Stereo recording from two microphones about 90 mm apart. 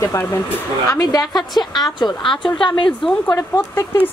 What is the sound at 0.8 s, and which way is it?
A woman's voice, 45° left (ahead or behind).